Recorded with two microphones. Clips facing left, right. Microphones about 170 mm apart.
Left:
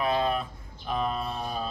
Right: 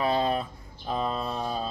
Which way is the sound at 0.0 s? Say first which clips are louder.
Right 1 dB; 30° right (ahead or behind).